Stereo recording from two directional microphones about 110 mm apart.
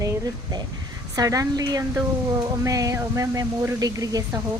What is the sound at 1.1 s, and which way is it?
Speech, 30° right (ahead or behind).